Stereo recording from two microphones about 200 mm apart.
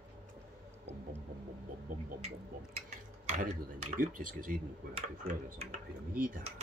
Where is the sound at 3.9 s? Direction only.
45° right (ahead or behind).